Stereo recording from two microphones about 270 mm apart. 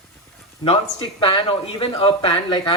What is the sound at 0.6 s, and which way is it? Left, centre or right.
Speech, centre.